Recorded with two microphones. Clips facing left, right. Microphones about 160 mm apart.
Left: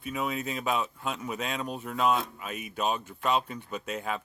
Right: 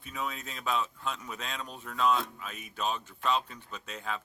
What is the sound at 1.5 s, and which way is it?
Speech, 55° left (ahead or behind).